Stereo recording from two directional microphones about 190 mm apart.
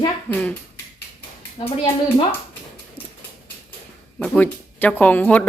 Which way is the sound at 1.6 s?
25° left (ahead or behind).